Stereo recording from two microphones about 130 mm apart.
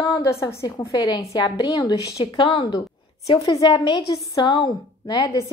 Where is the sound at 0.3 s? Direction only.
20° left (ahead or behind).